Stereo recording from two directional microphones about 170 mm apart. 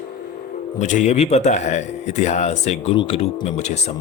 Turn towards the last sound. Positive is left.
turn(degrees=40)  # may be behind; listen again after turning